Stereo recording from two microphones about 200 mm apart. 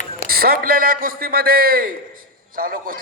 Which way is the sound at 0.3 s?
50° right (ahead or behind).